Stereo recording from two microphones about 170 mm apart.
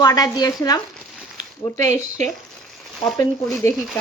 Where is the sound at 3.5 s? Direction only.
10° left (ahead or behind).